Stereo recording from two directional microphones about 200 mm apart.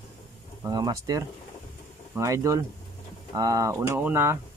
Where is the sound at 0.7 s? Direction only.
20° right (ahead or behind).